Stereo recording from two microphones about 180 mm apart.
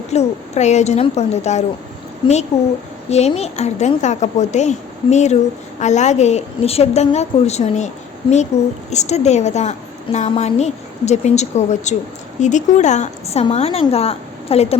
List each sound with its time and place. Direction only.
0.1 s a woman's voice: 35° left (ahead or behind)